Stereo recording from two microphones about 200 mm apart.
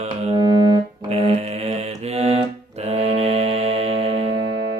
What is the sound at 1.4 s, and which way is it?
Mantra, 30° right (ahead or behind).